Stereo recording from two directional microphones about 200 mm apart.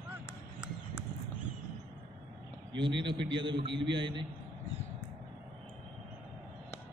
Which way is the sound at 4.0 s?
25° right (ahead or behind).